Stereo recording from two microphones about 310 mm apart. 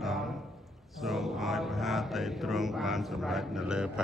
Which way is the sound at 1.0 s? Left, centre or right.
Centre.